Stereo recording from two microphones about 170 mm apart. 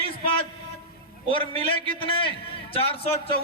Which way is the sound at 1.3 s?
30° left (ahead or behind).